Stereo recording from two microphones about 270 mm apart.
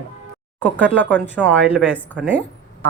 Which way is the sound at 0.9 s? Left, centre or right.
Centre.